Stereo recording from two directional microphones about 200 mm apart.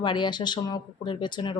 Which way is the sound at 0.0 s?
25° left (ahead or behind).